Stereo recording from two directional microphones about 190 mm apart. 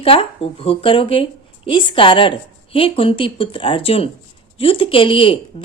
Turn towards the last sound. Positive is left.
turn(degrees=30)  # may be behind; listen again after turning